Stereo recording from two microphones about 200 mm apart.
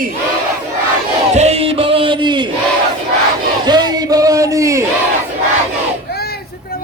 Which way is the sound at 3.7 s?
20° right (ahead or behind).